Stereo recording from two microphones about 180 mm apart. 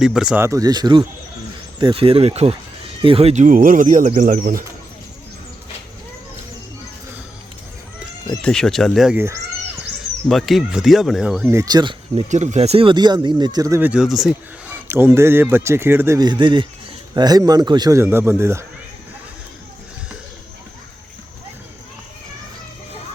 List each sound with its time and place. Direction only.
0.0 s speech: 5° right (ahead or behind)
0.4 s speech: 20° right (ahead or behind); by 4.6 s 50° right (ahead or behind)
8.4 s speech: 5° left (ahead or behind)
11.4 s speech: 15° right (ahead or behind)
12.3 s speech: 40° right (ahead or behind); by 18.6 s 15° right (ahead or behind)